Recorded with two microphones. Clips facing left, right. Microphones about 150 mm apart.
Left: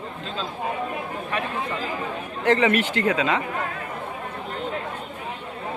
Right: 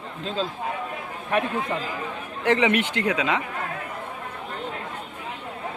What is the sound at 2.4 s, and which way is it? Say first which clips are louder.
Speech: left 1 dB; 15° right (ahead or behind).